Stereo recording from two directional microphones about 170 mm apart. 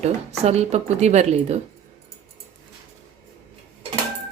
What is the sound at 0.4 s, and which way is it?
Speech, 40° right (ahead or behind).